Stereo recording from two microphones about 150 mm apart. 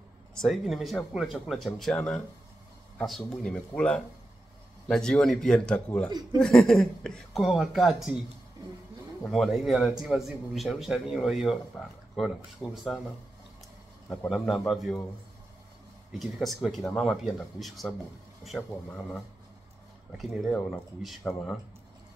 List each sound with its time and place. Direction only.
0.4 s a man's voice: centre (ahead or behind)
9.2 s a man's voice: centre (ahead or behind)
14.0 s a man's voice: 10° left (ahead or behind)
16.1 s a man's voice: centre (ahead or behind)
21.2 s speech: 15° left (ahead or behind)